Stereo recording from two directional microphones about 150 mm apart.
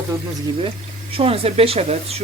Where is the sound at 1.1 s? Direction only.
40° right (ahead or behind).